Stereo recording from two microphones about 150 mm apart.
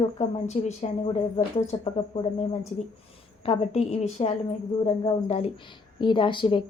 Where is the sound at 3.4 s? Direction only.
40° left (ahead or behind).